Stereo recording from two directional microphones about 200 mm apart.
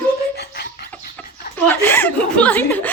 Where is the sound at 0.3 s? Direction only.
50° left (ahead or behind).